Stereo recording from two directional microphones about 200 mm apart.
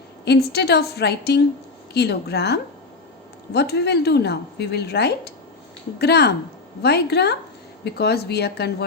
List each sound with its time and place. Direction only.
0.3 s a woman's voice: 55° left (ahead or behind)